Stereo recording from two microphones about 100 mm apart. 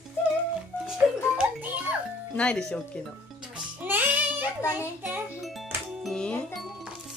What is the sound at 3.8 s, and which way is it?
Music, 20° right (ahead or behind).